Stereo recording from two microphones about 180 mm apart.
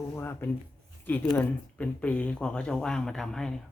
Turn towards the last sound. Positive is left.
turn(degrees=5)  # may be behind; listen again after turning